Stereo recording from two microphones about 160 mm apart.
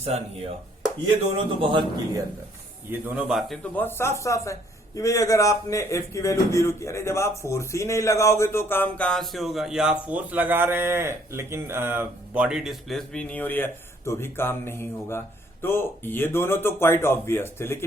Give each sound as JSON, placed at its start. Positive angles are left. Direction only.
{"t": 0.0, "sound": "a man's voice", "side_deg": -40}
{"t": 2.9, "sound": "speech", "side_deg": -10}
{"t": 3.6, "sound": "speech", "side_deg": 10}